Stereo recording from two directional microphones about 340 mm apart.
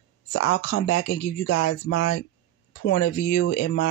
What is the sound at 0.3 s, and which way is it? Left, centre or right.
Speech, left.